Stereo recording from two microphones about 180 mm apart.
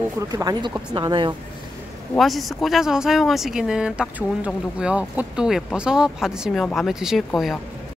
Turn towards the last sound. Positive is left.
turn(degrees=0)  # may be behind; listen again after turning